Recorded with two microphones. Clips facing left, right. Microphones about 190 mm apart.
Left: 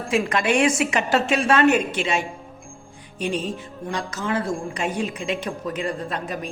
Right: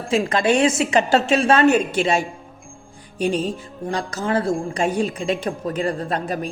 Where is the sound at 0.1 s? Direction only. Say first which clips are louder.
Right 3 dB; 30° right (ahead or behind).